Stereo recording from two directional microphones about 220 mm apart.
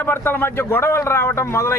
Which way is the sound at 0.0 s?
10° left (ahead or behind).